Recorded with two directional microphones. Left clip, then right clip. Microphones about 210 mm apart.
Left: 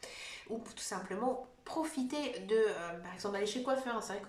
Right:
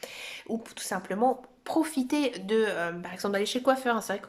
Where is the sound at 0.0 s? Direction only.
45° right (ahead or behind).